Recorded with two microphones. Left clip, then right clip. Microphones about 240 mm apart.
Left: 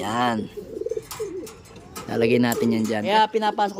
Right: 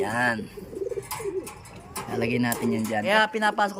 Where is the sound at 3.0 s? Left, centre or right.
Centre.